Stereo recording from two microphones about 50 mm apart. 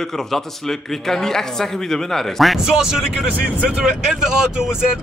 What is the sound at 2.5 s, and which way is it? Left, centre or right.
Speech, centre.